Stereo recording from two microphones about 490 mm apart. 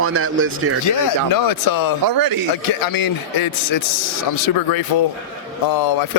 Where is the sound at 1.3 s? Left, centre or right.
Left.